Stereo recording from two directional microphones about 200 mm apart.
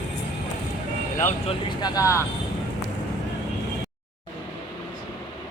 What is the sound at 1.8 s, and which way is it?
Speech, 20° left (ahead or behind).